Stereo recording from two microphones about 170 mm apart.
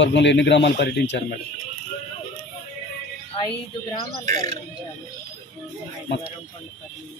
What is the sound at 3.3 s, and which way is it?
Speech, 25° left (ahead or behind).